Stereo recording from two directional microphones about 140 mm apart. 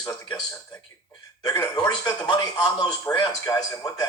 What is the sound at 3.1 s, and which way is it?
Speech, 15° left (ahead or behind).